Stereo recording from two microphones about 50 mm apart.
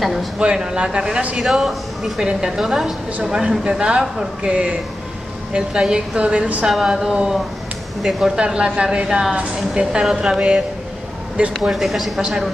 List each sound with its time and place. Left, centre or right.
0.0 s speech: centre
0.4 s speech: centre
1.4 s speech: centre
8.5 s speech: centre
10.0 s speech: centre
11.3 s speech: right
11.7 s speech: centre
12.2 s speech: centre